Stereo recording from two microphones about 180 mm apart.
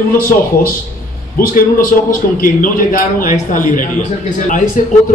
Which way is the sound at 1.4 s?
50° left (ahead or behind).